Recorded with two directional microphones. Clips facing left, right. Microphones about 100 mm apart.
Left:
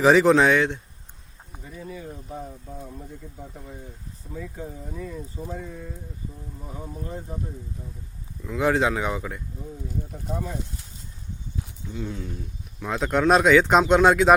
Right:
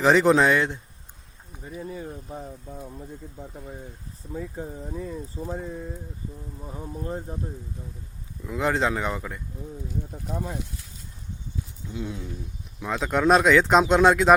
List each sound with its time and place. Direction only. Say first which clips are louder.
0.0 s speech: left 2 dB; centre (ahead or behind)
5.5 s speech: right 3 dB; 25° right (ahead or behind)
8.4 s speech: left 2 dB; centre (ahead or behind)
11.9 s speech: left 1 dB; 5° right (ahead or behind)